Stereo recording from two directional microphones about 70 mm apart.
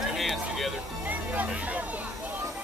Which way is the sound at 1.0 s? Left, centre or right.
Right.